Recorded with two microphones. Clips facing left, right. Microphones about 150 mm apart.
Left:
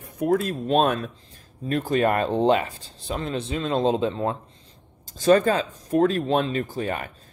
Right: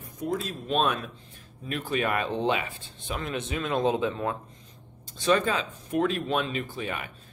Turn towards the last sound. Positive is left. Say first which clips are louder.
# left 6 dB
turn(degrees=40)  # may be behind; listen again after turning